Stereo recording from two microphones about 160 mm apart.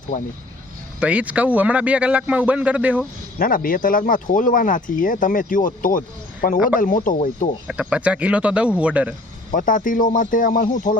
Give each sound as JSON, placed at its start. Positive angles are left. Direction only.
{"t": 0.9, "sound": "a man's voice", "side_deg": -10}
{"t": 3.3, "sound": "speech", "side_deg": 60}
{"t": 7.7, "sound": "a man's voice", "side_deg": -10}
{"t": 9.6, "sound": "speech", "side_deg": 55}